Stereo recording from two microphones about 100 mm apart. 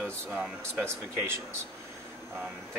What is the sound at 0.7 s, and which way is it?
Speech, 25° right (ahead or behind).